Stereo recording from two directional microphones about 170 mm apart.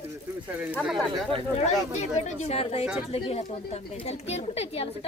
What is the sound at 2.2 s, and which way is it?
Speech, 40° left (ahead or behind).